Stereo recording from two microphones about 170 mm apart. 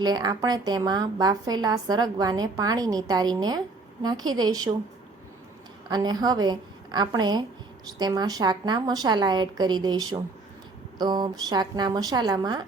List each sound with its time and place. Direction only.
0.0 s a woman's voice: 25° right (ahead or behind)
5.9 s a woman's voice: 25° right (ahead or behind)